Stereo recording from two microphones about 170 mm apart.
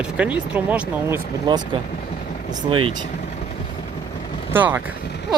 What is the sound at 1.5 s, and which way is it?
Speech, 25° right (ahead or behind).